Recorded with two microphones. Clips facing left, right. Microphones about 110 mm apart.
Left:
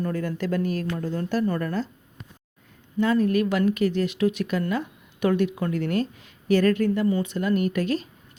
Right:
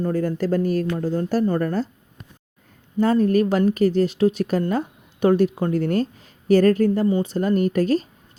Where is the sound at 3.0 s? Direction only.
35° right (ahead or behind).